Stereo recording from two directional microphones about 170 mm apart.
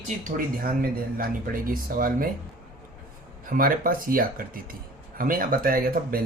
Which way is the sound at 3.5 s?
55° right (ahead or behind).